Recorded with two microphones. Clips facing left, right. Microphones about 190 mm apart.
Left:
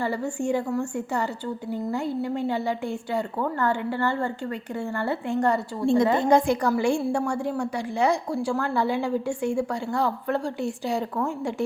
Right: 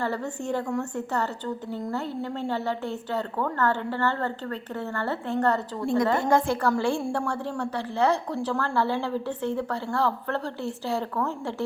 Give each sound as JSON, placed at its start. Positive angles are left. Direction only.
{"t": 0.0, "sound": "a woman's voice", "side_deg": 10}
{"t": 5.8, "sound": "a woman's voice", "side_deg": 25}